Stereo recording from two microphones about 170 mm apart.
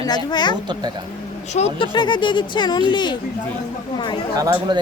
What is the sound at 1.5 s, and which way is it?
Speech, 40° left (ahead or behind).